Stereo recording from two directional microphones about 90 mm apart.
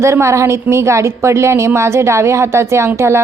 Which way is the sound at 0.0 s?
35° right (ahead or behind).